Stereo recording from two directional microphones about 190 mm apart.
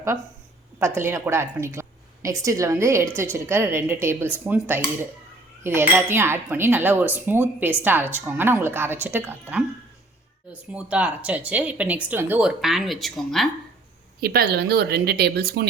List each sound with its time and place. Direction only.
0.8 s speech: 15° right (ahead or behind)
14.2 s speech: 55° right (ahead or behind)